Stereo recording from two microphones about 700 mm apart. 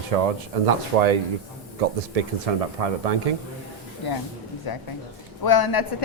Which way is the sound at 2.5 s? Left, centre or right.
Right.